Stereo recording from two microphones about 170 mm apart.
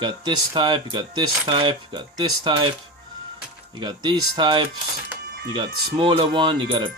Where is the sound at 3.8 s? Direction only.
25° right (ahead or behind).